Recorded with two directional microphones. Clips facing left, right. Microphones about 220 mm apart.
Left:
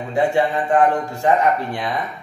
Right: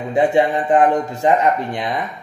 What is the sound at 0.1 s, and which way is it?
A man's voice, 20° right (ahead or behind).